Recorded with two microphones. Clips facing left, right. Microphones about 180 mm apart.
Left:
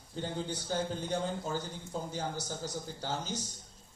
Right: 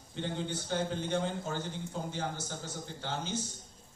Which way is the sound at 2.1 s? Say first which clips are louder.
Even; 40° left (ahead or behind).